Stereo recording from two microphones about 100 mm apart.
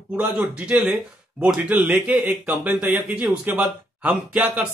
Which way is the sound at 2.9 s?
20° right (ahead or behind).